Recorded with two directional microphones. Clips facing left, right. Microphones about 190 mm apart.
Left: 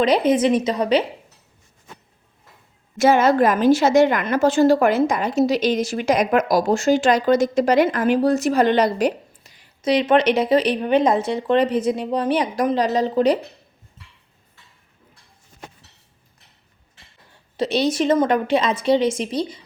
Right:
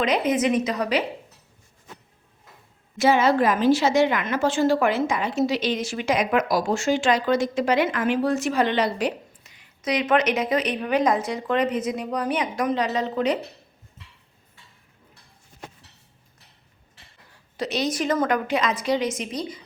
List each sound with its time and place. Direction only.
0.0 s a woman's voice: 30° left (ahead or behind)
3.0 s a woman's voice: 45° left (ahead or behind)
17.6 s a woman's voice: 30° left (ahead or behind)